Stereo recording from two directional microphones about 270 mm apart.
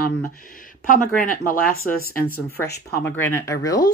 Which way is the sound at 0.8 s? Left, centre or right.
Left.